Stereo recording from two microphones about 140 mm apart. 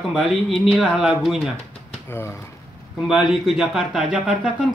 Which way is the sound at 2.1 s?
15° left (ahead or behind).